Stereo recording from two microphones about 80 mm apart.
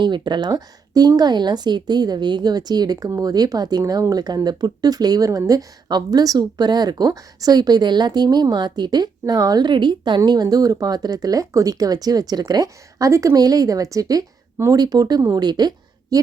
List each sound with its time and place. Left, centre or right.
0.0 s speech: right
10.2 s speech: right